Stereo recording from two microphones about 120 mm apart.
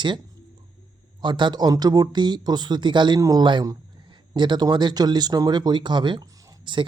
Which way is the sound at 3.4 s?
40° right (ahead or behind).